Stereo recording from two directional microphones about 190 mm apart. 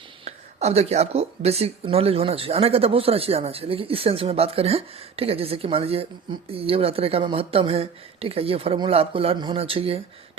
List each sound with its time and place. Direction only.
0.3 s speech: 35° right (ahead or behind)